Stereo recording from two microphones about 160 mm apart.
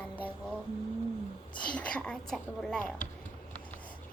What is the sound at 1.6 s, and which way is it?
A woman's voice, 5° left (ahead or behind).